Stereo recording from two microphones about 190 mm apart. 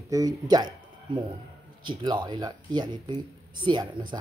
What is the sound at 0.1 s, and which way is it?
Speech, 20° right (ahead or behind).